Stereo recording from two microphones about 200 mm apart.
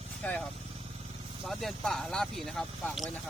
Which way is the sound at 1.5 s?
Centre (ahead or behind).